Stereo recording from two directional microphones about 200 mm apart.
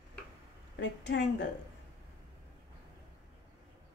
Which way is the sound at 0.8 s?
60° left (ahead or behind).